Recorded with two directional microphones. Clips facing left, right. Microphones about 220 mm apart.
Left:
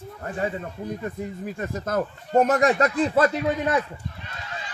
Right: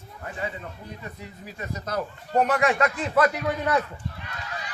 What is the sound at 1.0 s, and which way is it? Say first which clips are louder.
Speech: left 9 dB; 50° left (ahead or behind).